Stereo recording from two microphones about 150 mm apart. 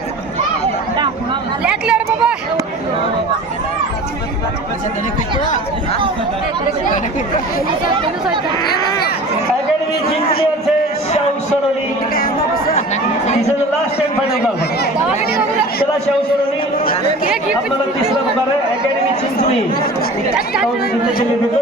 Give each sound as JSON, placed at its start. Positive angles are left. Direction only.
{"t": 1.6, "sound": "chatter", "side_deg": -5}
{"t": 12.1, "sound": "chatter", "side_deg": 80}